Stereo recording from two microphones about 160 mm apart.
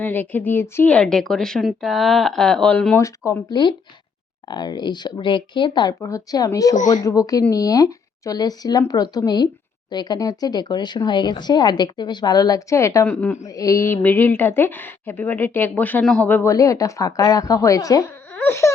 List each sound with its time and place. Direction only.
0.0 s a woman's voice: 10° left (ahead or behind)
3.0 s a woman's voice: 20° left (ahead or behind)
13.5 s a woman's voice: 20° left (ahead or behind)
18.3 s baby cry: 15° left (ahead or behind)